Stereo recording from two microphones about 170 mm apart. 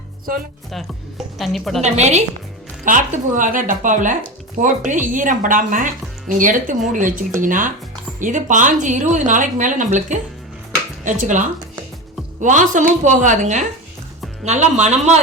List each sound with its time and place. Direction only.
1.4 s a woman's voice: centre (ahead or behind)
1.8 s speech: 40° right (ahead or behind)